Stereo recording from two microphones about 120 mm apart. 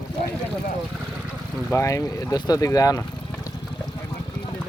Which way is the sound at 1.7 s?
25° left (ahead or behind).